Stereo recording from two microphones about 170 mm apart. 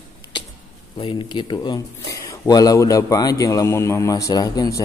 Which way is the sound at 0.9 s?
30° left (ahead or behind).